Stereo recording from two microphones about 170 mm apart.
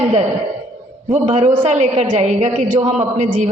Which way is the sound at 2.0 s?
30° right (ahead or behind).